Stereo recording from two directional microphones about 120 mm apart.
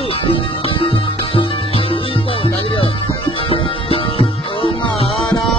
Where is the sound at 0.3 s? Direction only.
45° left (ahead or behind).